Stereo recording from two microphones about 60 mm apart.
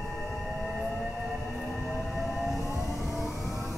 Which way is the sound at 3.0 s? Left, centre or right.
Centre.